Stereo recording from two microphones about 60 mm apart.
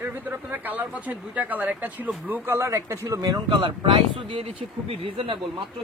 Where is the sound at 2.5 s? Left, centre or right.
Right.